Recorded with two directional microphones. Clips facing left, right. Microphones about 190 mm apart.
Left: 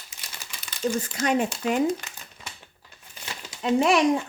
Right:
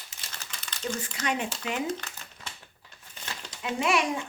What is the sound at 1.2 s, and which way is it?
Speech, 40° left (ahead or behind).